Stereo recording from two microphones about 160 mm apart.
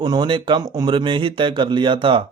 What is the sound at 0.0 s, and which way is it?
Speech, 30° right (ahead or behind).